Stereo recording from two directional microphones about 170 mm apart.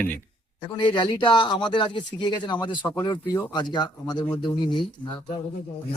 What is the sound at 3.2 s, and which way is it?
Speech, 15° left (ahead or behind).